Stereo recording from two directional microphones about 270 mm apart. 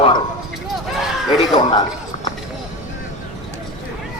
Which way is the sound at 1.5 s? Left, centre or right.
Centre.